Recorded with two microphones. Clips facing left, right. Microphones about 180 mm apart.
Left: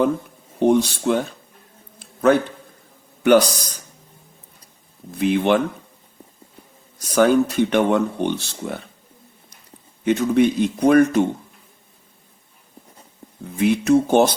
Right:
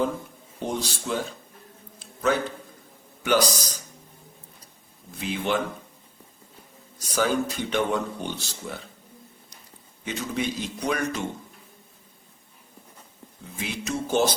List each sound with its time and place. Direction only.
0.6 s speech: 65° left (ahead or behind)
2.0 s a sound: 55° left (ahead or behind)
3.2 s speech: 55° left (ahead or behind)
5.1 s speech: 60° left (ahead or behind)
7.0 s speech: 60° left (ahead or behind)
10.0 s speech: 60° left (ahead or behind)
13.6 s speech: 60° left (ahead or behind)